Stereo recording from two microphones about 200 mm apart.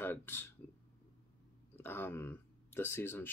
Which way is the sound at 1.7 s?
10° left (ahead or behind).